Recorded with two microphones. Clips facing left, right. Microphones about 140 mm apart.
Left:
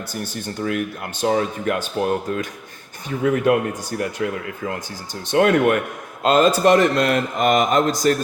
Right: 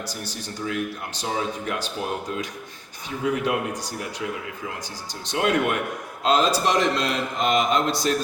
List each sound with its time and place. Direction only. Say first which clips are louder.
0.1 s a man's voice: left 5 dB; 55° left (ahead or behind)